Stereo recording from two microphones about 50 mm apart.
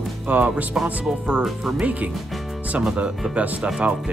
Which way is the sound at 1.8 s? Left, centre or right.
Right.